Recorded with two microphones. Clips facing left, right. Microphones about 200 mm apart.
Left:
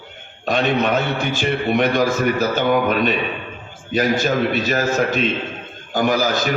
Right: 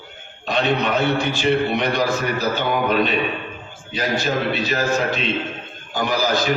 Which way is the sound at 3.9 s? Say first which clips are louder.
Left 4 dB; 50° left (ahead or behind).